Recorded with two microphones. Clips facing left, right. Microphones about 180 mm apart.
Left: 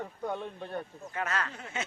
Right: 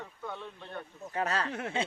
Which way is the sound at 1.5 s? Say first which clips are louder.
Right 9 dB; 70° right (ahead or behind).